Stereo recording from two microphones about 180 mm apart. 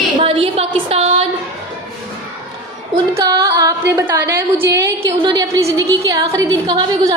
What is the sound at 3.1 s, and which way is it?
A woman's voice, 20° right (ahead or behind).